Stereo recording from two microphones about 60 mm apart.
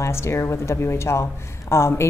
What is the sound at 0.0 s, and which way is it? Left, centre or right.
Speech, left.